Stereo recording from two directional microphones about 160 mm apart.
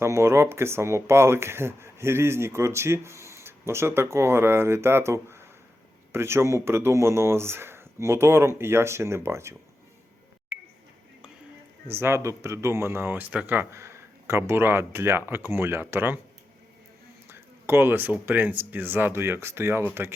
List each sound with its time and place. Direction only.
0.0 s speech: 15° right (ahead or behind)
11.9 s speech: 15° right (ahead or behind)
17.2 s speech: 15° right (ahead or behind)